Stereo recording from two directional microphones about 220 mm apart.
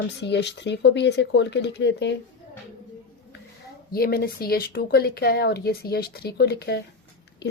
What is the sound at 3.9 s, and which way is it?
Speech, 45° left (ahead or behind).